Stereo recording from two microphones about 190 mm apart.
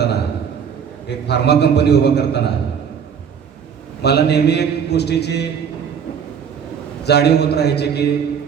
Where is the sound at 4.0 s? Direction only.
60° left (ahead or behind).